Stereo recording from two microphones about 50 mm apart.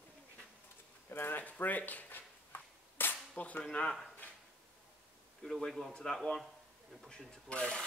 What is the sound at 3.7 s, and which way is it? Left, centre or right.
Speech, centre.